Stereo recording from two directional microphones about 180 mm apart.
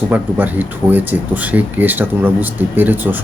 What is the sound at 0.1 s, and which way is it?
Speech, 10° right (ahead or behind).